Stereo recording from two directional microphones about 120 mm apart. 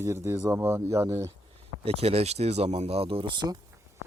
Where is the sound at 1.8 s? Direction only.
55° right (ahead or behind); by 3.6 s 40° right (ahead or behind).